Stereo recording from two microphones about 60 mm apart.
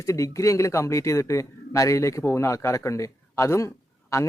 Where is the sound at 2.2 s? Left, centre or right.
Left.